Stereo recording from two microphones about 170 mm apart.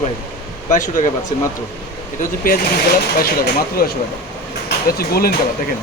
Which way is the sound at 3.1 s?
60° left (ahead or behind).